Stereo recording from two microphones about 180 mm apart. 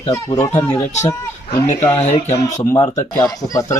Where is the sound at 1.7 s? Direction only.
15° left (ahead or behind).